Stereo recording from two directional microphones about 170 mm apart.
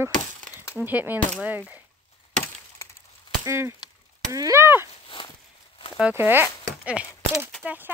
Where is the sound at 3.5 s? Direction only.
15° right (ahead or behind).